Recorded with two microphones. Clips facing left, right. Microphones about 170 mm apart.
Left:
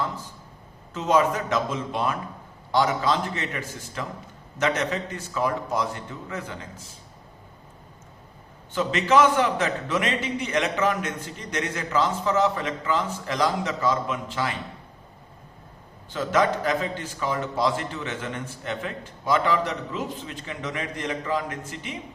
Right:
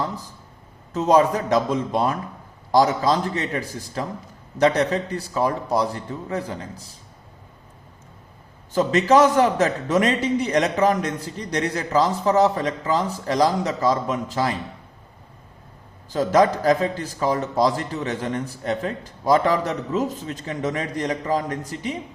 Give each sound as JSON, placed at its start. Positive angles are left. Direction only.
{"t": 0.9, "sound": "a man's voice", "side_deg": -40}
{"t": 8.7, "sound": "a man's voice", "side_deg": -40}
{"t": 16.0, "sound": "a man's voice", "side_deg": -40}